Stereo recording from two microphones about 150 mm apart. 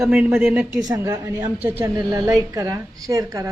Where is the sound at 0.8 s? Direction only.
25° right (ahead or behind).